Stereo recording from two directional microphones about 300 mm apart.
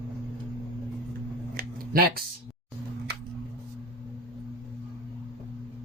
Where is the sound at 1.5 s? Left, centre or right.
Right.